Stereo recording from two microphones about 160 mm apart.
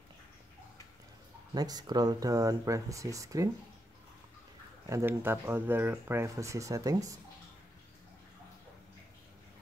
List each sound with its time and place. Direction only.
1.5 s speech: 25° right (ahead or behind)
4.8 s speech: 15° right (ahead or behind)